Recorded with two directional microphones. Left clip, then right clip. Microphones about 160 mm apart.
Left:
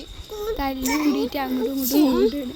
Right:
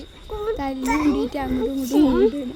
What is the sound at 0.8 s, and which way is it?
Speech, 35° right (ahead or behind).